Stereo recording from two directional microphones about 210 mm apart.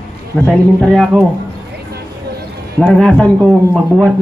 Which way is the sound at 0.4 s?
5° left (ahead or behind).